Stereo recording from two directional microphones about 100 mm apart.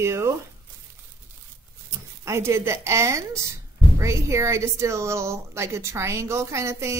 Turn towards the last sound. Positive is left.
turn(degrees=-30)  # may be behind; listen again after turning